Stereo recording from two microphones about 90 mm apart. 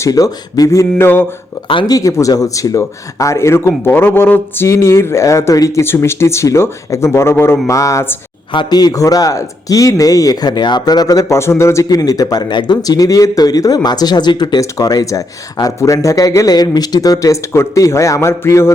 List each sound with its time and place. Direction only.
0.0 s speech: 45° left (ahead or behind); by 1.2 s 25° left (ahead or behind)
1.9 s speech: 40° left (ahead or behind)
7.7 s speech: 35° left (ahead or behind)
8.5 s a man's voice: 50° left (ahead or behind); by 18.7 s 30° left (ahead or behind)